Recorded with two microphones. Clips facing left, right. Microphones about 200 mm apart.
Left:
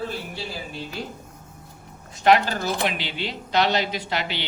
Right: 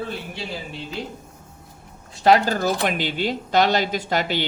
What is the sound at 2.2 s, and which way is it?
A man's voice, 40° right (ahead or behind).